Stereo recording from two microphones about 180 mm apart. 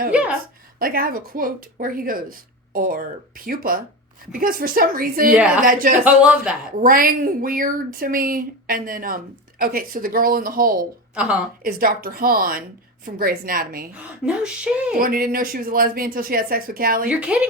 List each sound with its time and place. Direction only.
0.1 s a woman's voice: 5° right (ahead or behind)
0.8 s speech: 55° right (ahead or behind)
5.4 s a woman's voice: 5° right (ahead or behind)
6.8 s speech: 50° right (ahead or behind)
11.1 s speech: 5° right (ahead or behind)
11.6 s speech: 55° right (ahead or behind)
13.9 s a woman's voice: 5° right (ahead or behind)
14.9 s speech: 50° right (ahead or behind)
17.1 s speech: 5° right (ahead or behind)